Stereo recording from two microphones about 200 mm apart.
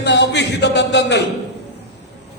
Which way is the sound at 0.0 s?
60° left (ahead or behind).